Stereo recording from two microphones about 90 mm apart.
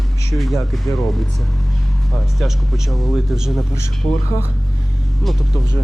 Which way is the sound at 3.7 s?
35° left (ahead or behind).